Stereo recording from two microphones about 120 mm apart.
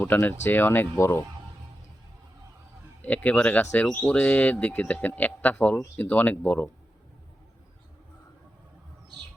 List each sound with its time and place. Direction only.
0.0 s speech: 15° left (ahead or behind)
3.0 s speech: 15° left (ahead or behind)